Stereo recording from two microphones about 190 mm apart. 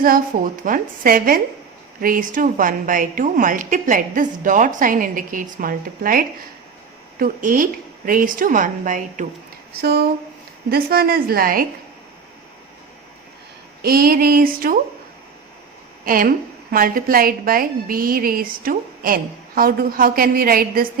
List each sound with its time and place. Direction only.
0.0 s a woman's voice: 45° right (ahead or behind)
9.8 s a woman's voice: 55° right (ahead or behind)
13.8 s a woman's voice: 50° right (ahead or behind)
16.0 s a woman's voice: 45° right (ahead or behind)